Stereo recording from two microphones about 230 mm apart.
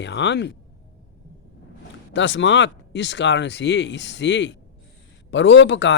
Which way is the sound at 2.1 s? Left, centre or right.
Left.